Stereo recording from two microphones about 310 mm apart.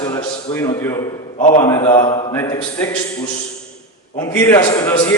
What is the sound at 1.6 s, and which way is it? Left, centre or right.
A man's voice, centre.